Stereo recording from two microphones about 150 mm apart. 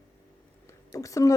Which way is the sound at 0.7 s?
20° left (ahead or behind).